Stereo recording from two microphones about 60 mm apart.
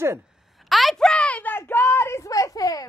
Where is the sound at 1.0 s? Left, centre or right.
Centre.